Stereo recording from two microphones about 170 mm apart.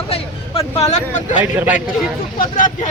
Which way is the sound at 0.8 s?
40° left (ahead or behind).